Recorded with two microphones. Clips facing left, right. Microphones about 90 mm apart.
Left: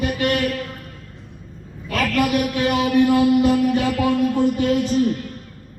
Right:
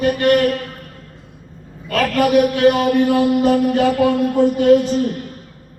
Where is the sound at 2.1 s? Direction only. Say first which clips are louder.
Right 6 dB; 45° right (ahead or behind).